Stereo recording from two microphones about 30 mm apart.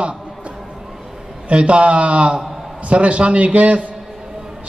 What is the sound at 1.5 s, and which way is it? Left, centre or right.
Speech, right.